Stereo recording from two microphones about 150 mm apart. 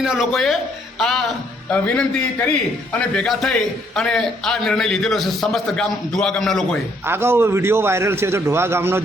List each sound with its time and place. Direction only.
0.0 s a man's voice: 5° right (ahead or behind)
7.1 s a man's voice: 15° right (ahead or behind)